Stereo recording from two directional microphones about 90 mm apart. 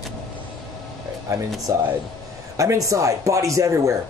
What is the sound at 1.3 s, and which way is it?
A man's voice, 35° right (ahead or behind).